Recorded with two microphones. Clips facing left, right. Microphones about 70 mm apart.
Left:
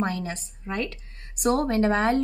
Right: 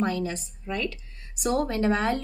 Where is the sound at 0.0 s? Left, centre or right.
Left.